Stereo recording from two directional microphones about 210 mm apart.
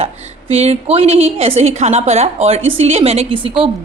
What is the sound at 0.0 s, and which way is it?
A woman's voice, 30° right (ahead or behind).